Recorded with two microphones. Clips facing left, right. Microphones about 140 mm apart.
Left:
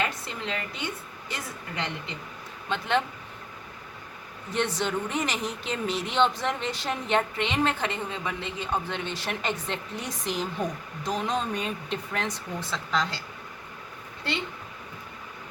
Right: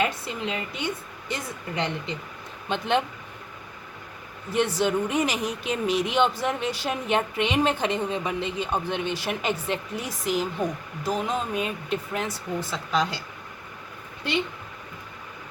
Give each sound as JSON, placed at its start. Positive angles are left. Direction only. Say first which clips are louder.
{"t": 0.0, "sound": "a sound", "louder": "right 4 dB", "side_deg": -15}
{"t": 1.3, "sound": "speech", "louder": "right 5 dB", "side_deg": -20}
{"t": 4.5, "sound": "speech", "louder": "right 4 dB", "side_deg": -10}